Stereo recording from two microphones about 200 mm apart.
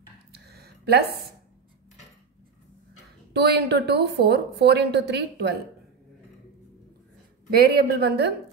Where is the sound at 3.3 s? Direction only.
55° right (ahead or behind).